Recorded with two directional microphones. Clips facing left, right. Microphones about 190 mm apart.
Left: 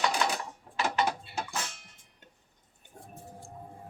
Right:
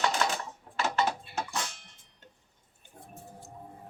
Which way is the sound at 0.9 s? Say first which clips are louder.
Right 1 dB; 15° left (ahead or behind).